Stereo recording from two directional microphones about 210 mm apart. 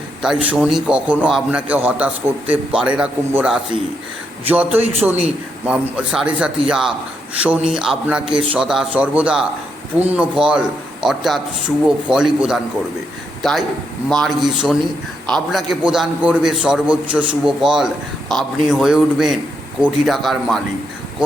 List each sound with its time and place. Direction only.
0.2 s a man's voice: 5° right (ahead or behind)
21.2 s speech: 20° right (ahead or behind)